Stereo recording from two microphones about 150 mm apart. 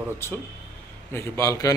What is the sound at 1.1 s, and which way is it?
Speech, 15° left (ahead or behind).